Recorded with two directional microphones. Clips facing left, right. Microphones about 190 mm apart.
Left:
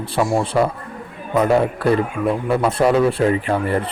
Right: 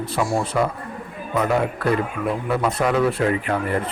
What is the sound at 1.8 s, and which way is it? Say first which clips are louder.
A man's voice: left 4 dB; 30° left (ahead or behind).